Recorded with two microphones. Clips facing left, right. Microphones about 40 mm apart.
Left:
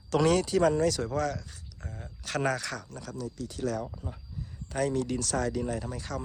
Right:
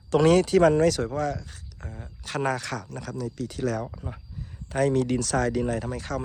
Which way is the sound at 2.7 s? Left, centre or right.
Right.